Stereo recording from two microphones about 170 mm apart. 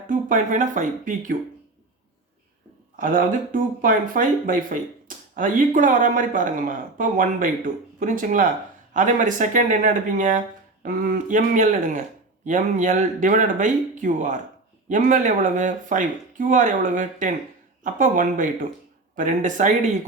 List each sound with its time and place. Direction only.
0.1 s speech: 50° right (ahead or behind)
2.9 s speech: 55° right (ahead or behind)